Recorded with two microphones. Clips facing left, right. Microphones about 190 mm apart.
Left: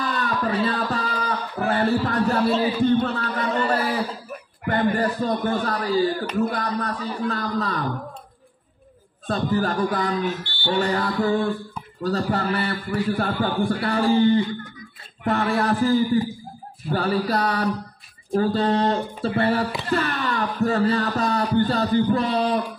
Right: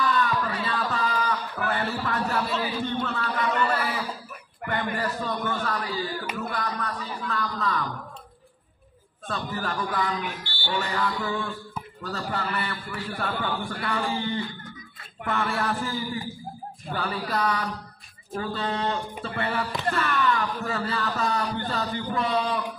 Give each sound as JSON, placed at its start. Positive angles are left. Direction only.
{"t": 0.2, "sound": "music", "side_deg": 35}
{"t": 3.0, "sound": "a sound", "side_deg": 45}
{"t": 4.6, "sound": "speech", "side_deg": 40}
{"t": 9.3, "sound": "speech", "side_deg": 35}
{"t": 10.2, "sound": "speech", "side_deg": -10}
{"t": 10.7, "sound": "speech", "side_deg": 40}
{"t": 15.2, "sound": "speech", "side_deg": 35}